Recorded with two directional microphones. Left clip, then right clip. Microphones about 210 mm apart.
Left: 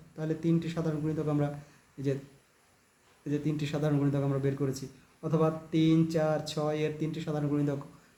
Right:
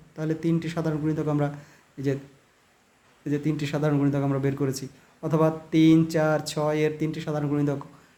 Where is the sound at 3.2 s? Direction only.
30° right (ahead or behind).